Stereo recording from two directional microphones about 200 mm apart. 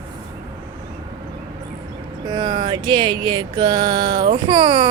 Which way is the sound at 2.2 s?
20° right (ahead or behind).